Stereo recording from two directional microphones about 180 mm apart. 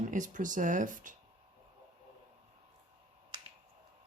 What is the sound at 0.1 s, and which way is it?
Speech, 45° right (ahead or behind).